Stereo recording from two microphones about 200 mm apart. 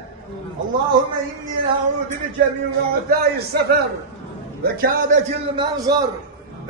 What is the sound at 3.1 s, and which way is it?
A man's voice, 50° right (ahead or behind).